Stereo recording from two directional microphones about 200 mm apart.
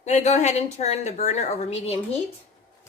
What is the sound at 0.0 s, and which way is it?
A woman's voice, 35° left (ahead or behind).